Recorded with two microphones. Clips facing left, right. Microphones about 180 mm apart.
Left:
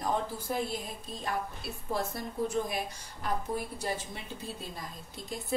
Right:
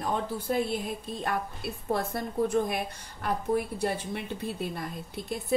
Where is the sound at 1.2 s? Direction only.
60° right (ahead or behind).